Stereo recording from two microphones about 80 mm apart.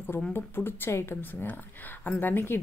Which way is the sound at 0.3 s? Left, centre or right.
Left.